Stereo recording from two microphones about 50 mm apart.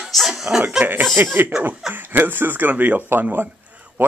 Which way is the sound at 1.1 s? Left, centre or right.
Right.